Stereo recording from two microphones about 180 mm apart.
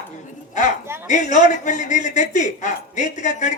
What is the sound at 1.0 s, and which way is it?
A man's voice, 40° left (ahead or behind).